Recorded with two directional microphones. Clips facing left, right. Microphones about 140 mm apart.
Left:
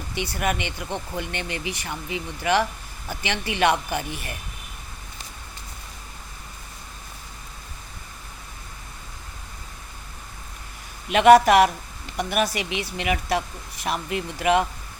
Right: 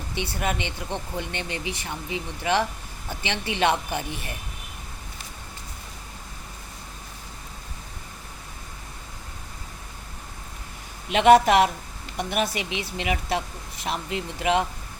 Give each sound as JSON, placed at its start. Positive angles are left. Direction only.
{"t": 0.2, "sound": "speech", "side_deg": -25}
{"t": 0.9, "sound": "speech", "side_deg": 5}
{"t": 1.2, "sound": "speech", "side_deg": -25}
{"t": 11.1, "sound": "speech", "side_deg": -25}